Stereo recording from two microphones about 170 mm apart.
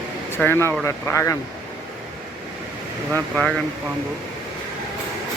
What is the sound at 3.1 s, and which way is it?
Speech, 5° left (ahead or behind).